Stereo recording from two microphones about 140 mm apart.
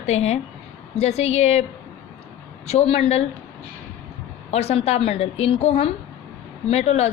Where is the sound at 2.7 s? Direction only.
50° left (ahead or behind).